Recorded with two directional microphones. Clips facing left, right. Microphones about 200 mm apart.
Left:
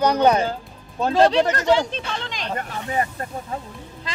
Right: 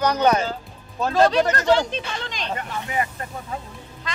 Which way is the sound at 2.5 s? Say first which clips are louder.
Left 2 dB; 40° left (ahead or behind).